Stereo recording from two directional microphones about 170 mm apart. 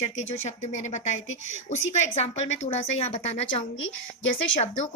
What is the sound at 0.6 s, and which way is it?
A woman's voice, 45° left (ahead or behind).